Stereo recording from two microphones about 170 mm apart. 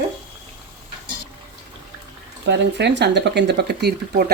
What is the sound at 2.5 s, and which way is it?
Speech, 90° right.